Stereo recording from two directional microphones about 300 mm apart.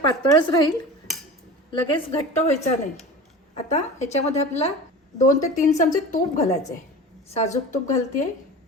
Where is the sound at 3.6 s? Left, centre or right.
Left.